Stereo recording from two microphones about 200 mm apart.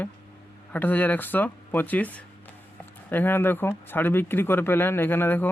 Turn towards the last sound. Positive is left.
turn(degrees=10)  # may be behind; listen again after turning